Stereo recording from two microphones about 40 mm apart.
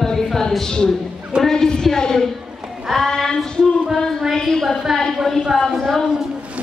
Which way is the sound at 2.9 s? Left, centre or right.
Centre.